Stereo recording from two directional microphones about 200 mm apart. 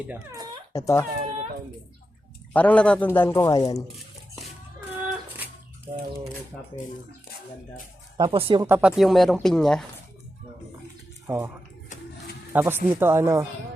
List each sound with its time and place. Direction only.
0.1 s speech: 15° right (ahead or behind)
0.7 s speech: 15° left (ahead or behind)
1.1 s cat: 40° right (ahead or behind)
2.5 s speech: 10° left (ahead or behind)
8.2 s speech: 25° right (ahead or behind)
8.6 s speech: 5° right (ahead or behind)
11.3 s speech: 10° right (ahead or behind)
12.5 s speech: 10° right (ahead or behind)